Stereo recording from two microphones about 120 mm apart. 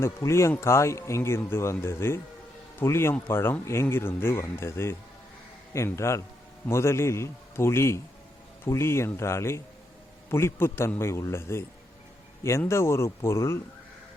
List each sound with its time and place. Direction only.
0.0 s speech: 25° left (ahead or behind)